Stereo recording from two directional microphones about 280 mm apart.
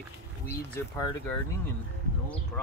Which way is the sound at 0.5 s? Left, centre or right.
Centre.